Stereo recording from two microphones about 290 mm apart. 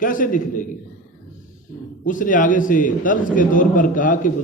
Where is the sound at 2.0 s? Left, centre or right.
Left.